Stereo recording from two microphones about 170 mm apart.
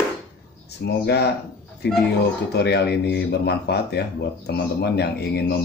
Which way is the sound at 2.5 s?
75° left (ahead or behind).